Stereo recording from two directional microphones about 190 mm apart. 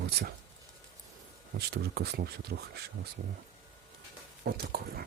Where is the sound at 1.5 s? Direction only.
55° right (ahead or behind).